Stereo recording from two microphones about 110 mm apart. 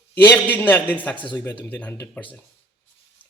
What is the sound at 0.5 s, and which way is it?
Speech, 15° left (ahead or behind).